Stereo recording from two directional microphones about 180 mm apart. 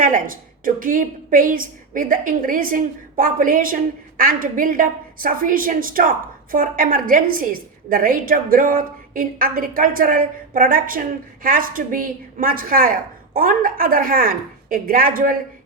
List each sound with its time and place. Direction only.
0.0 s a woman's voice: 50° right (ahead or behind)